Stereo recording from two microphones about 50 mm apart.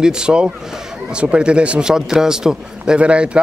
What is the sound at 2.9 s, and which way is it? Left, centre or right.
Speech, right.